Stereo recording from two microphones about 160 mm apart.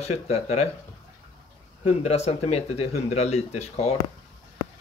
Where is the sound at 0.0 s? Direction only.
40° left (ahead or behind).